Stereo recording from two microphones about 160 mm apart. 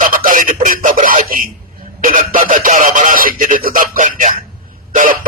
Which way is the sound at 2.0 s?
60° right (ahead or behind).